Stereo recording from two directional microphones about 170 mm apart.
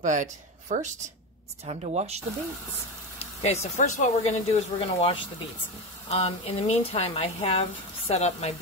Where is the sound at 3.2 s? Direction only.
40° left (ahead or behind).